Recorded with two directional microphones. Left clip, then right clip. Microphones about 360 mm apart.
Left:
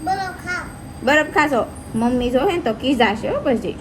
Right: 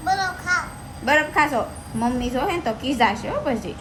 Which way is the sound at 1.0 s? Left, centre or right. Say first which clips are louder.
Left 2 dB; left.